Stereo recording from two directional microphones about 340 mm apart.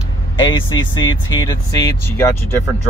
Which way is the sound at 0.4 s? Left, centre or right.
Centre.